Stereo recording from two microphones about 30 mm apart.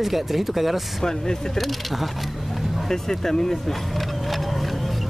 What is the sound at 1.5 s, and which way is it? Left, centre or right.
Speech, centre.